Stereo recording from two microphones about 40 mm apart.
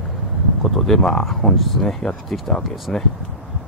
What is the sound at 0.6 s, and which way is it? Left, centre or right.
Speech, centre.